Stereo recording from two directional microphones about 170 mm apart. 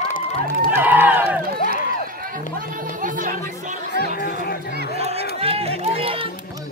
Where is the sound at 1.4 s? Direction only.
60° right (ahead or behind).